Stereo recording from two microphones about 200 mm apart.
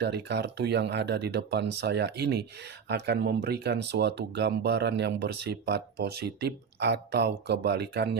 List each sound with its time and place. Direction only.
0.0 s speech: 55° right (ahead or behind)